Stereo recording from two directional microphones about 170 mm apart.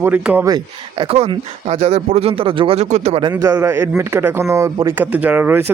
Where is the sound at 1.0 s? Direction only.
35° right (ahead or behind).